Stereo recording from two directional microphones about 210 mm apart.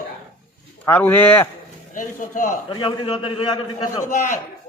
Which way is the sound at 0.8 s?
10° left (ahead or behind).